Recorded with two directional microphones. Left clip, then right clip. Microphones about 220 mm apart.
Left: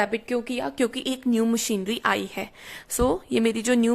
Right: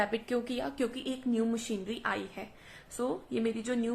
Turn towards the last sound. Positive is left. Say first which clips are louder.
# left 10 dB
turn(degrees=50)  # may be behind; listen again after turning